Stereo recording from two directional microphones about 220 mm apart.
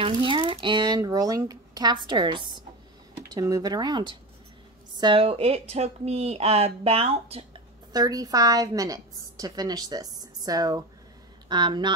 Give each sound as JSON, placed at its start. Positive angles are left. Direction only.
{"t": 0.0, "sound": "speech", "side_deg": -20}